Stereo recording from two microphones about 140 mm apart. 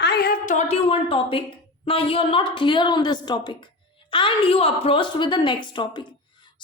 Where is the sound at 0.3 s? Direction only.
65° left (ahead or behind).